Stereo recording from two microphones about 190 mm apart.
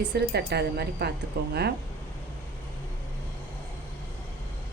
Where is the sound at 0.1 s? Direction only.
60° right (ahead or behind).